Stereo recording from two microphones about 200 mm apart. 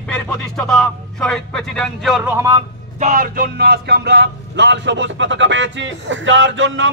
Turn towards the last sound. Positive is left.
turn(degrees=-70)  # may be behind; listen again after turning